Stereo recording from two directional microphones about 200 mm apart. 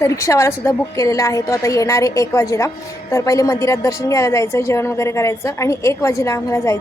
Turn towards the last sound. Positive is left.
turn(degrees=15)  # may be behind; listen again after turning